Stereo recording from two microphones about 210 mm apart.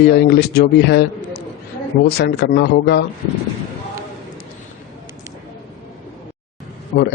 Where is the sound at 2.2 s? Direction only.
50° left (ahead or behind).